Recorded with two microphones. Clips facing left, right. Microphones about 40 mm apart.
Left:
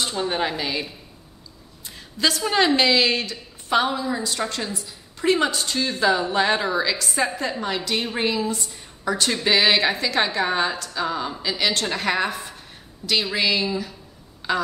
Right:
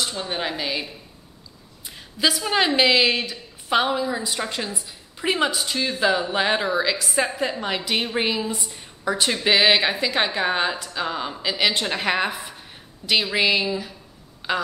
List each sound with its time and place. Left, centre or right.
0.2 s a woman's voice: centre
1.9 s a woman's voice: centre
14.4 s a sound: centre